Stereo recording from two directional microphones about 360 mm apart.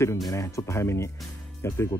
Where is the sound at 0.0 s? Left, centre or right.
Centre.